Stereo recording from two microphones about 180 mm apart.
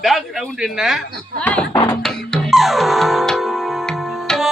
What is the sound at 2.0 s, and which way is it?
Music, 5° left (ahead or behind).